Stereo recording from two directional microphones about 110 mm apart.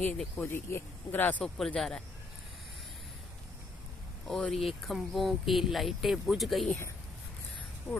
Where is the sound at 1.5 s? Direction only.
5° left (ahead or behind).